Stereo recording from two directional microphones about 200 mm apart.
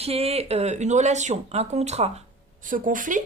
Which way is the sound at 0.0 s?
30° right (ahead or behind).